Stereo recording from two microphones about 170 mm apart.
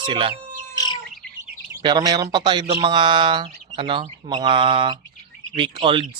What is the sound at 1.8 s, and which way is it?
Speech, 25° right (ahead or behind).